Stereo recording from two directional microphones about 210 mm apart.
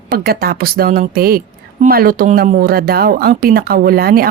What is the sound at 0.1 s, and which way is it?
A woman's voice, 45° right (ahead or behind).